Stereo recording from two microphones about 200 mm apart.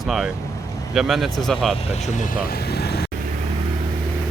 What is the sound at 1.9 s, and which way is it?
Speech, 35° left (ahead or behind).